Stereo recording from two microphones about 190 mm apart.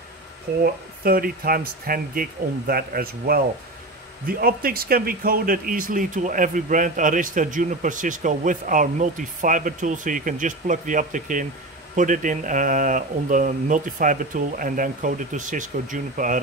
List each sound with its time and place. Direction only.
1.0 s speech: 50° right (ahead or behind)